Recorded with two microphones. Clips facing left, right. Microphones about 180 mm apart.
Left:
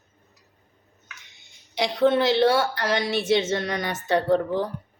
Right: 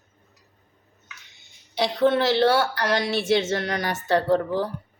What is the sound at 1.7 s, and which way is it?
A woman's voice, 20° left (ahead or behind).